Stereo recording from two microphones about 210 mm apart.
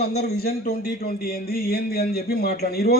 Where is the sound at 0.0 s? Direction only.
50° left (ahead or behind).